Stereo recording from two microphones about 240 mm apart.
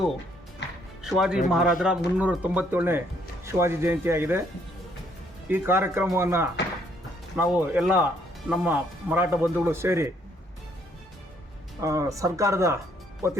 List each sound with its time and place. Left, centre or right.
0.6 s music: left
1.0 s speech: centre
5.5 s speech: centre
11.8 s speech: centre